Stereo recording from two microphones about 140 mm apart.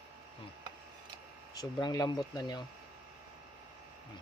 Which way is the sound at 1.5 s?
30° left (ahead or behind).